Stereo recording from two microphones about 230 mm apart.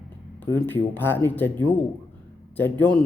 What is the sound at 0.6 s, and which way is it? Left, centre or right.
A man's voice, centre.